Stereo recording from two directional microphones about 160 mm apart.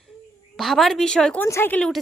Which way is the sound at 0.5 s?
Centre (ahead or behind).